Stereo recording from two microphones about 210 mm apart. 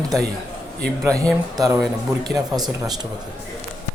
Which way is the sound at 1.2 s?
15° right (ahead or behind).